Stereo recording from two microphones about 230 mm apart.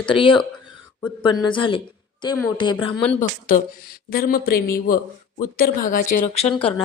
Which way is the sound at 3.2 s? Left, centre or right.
Left.